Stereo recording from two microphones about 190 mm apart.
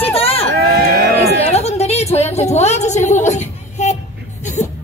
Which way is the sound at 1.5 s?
35° left (ahead or behind).